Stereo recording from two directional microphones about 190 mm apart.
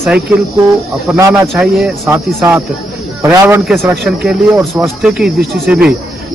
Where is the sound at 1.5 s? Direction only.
Centre (ahead or behind).